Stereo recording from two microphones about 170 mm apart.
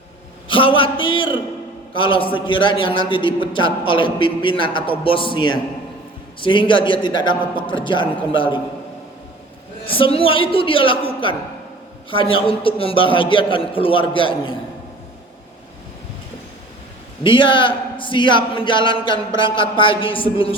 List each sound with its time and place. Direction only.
0.4 s a man's voice: 30° left (ahead or behind)
9.8 s a man's voice: 30° left (ahead or behind)
12.1 s a man's voice: 30° left (ahead or behind)
17.2 s a man's voice: 30° left (ahead or behind)